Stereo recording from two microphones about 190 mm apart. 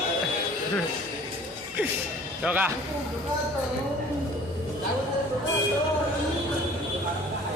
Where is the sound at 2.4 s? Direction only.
10° right (ahead or behind).